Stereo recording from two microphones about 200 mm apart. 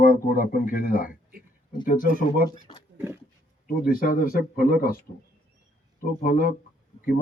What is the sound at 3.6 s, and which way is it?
Speech, 45° left (ahead or behind).